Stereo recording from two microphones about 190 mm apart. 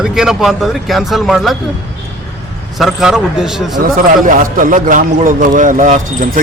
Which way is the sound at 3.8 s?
45° right (ahead or behind).